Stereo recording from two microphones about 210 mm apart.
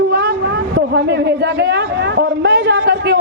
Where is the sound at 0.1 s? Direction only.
55° right (ahead or behind).